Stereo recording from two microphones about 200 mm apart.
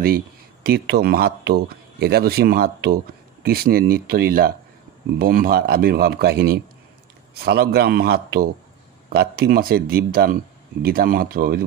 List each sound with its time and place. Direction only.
0.7 s speech: 50° right (ahead or behind)